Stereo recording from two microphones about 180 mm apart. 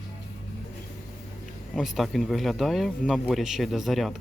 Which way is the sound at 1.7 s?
Centre (ahead or behind).